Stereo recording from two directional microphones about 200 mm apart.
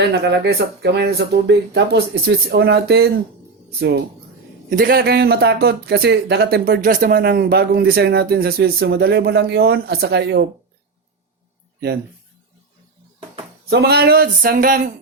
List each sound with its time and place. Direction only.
0.0 s speech: 55° right (ahead or behind)
13.7 s speech: 55° right (ahead or behind)